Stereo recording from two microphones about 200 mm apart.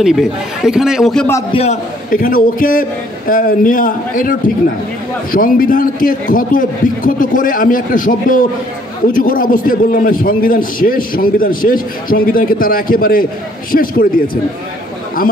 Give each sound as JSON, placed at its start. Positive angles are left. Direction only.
{"t": 0.0, "sound": "a man's voice", "side_deg": -5}
{"t": 1.5, "sound": "a man's voice", "side_deg": 30}
{"t": 2.0, "sound": "a man's voice", "side_deg": 45}